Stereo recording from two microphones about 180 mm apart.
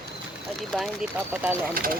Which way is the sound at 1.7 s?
55° right (ahead or behind).